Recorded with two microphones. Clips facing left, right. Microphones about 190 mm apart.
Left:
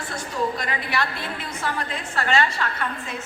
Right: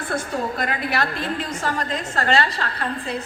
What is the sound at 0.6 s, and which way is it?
A woman's voice, 45° right (ahead or behind).